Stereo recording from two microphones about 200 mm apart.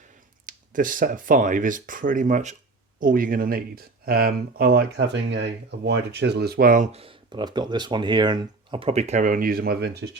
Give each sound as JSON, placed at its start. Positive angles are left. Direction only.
{"t": 0.4, "sound": "speech", "side_deg": -40}
{"t": 6.9, "sound": "speech", "side_deg": -25}